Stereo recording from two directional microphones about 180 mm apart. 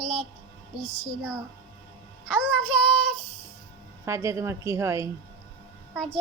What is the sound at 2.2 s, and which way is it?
Music, 5° left (ahead or behind).